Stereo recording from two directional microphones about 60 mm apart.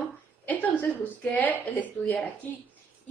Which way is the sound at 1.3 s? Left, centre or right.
Left.